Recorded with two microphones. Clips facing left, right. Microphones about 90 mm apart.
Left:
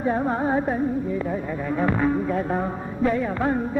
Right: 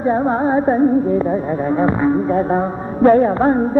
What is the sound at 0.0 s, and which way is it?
Music, 30° right (ahead or behind).